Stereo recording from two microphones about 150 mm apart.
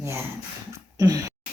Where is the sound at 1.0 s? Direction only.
25° right (ahead or behind).